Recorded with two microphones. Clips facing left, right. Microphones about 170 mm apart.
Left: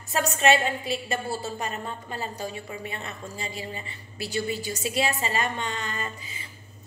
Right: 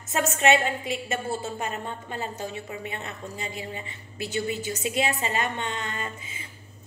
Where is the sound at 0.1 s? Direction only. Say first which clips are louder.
Even; centre (ahead or behind).